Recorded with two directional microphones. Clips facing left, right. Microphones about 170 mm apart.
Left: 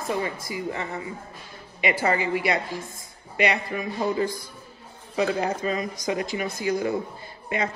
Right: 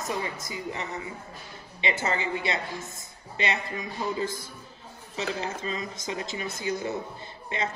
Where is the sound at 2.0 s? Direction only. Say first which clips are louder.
Left 7 dB; 25° right (ahead or behind).